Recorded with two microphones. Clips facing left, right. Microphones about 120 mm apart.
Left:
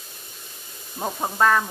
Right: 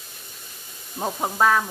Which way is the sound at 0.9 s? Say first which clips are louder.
Even; 5° right (ahead or behind).